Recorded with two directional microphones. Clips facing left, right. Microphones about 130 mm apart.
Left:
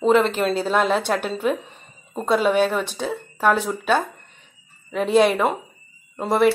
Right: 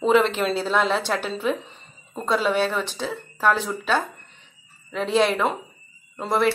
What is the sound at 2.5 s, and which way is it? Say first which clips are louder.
Speech: left 3 dB; 50° left (ahead or behind).